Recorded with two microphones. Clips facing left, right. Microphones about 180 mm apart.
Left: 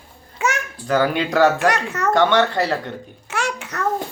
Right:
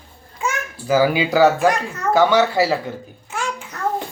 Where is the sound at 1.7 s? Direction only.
75° left (ahead or behind).